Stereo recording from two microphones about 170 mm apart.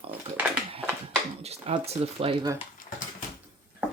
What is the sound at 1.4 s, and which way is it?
Speech, 40° right (ahead or behind).